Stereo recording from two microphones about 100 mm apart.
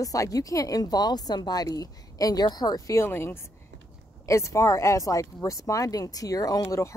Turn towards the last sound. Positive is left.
turn(degrees=40)  # may be behind; listen again after turning